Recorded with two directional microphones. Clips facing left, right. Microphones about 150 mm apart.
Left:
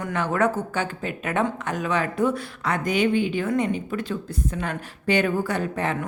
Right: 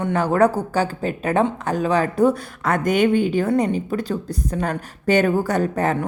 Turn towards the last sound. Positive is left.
turn(degrees=-40)  # may be behind; listen again after turning